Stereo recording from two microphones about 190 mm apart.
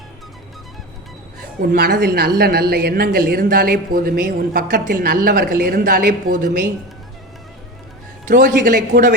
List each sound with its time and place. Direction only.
1.7 s a woman's voice: 55° right (ahead or behind)
8.3 s speech: 45° right (ahead or behind)